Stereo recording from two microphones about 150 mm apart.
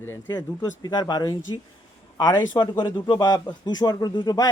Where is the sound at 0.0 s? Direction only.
15° left (ahead or behind).